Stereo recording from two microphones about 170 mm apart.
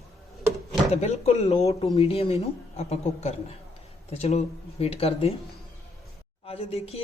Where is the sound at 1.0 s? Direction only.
40° left (ahead or behind).